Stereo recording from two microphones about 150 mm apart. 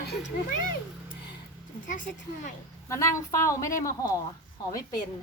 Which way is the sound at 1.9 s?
60° left (ahead or behind).